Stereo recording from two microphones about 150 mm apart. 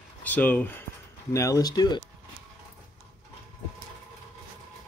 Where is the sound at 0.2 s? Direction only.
10° left (ahead or behind); by 2.0 s 30° left (ahead or behind).